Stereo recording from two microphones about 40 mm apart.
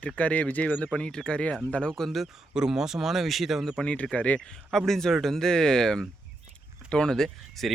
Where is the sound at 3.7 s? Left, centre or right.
Left.